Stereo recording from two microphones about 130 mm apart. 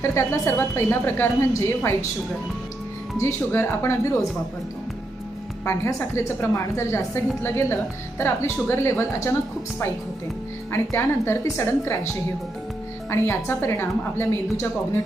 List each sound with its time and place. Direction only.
0.0 s a woman's voice: 20° left (ahead or behind)
3.2 s a woman's voice: 20° left (ahead or behind)
5.6 s a woman's voice: 20° left (ahead or behind)
10.7 s a woman's voice: 20° left (ahead or behind)
13.1 s a woman's voice: 20° left (ahead or behind)